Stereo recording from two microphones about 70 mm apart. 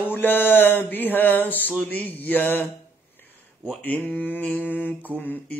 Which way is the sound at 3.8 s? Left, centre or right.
Left.